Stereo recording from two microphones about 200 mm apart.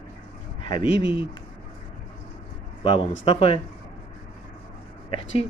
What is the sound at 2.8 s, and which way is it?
Speech, 25° left (ahead or behind).